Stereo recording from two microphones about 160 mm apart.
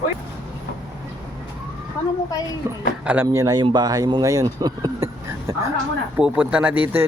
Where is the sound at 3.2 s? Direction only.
20° right (ahead or behind).